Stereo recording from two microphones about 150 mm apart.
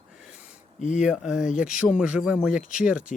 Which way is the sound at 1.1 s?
5° right (ahead or behind).